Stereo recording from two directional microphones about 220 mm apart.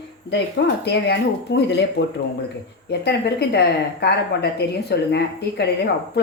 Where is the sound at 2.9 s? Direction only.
50° left (ahead or behind).